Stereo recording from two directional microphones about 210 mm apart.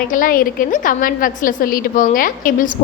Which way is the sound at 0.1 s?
40° left (ahead or behind).